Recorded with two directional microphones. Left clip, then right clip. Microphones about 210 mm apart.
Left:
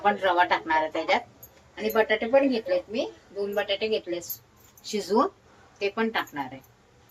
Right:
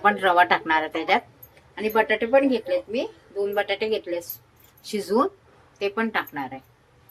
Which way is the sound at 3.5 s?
30° right (ahead or behind).